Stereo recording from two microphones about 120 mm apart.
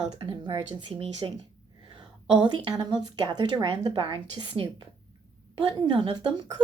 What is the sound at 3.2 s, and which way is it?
A woman's voice, 40° right (ahead or behind).